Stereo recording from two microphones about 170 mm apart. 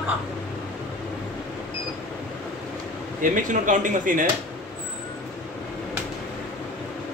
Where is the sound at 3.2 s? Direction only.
50° right (ahead or behind).